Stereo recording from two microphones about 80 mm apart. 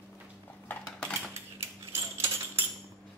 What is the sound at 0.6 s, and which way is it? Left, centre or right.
Cutlery, centre.